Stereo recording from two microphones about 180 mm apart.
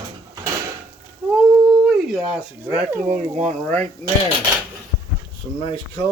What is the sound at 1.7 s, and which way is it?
Speech, centre (ahead or behind).